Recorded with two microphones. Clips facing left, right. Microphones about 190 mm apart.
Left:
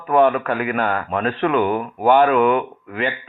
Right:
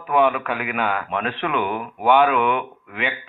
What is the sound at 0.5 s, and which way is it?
Speech, 5° right (ahead or behind).